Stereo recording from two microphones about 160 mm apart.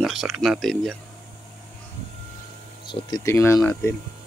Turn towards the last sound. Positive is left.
turn(degrees=15)  # may be behind; listen again after turning